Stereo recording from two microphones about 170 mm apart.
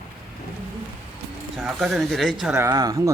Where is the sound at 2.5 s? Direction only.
20° right (ahead or behind).